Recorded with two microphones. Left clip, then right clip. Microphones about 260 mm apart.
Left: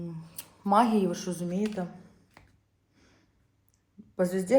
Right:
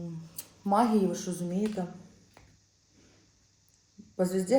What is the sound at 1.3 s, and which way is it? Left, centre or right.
Speech, left.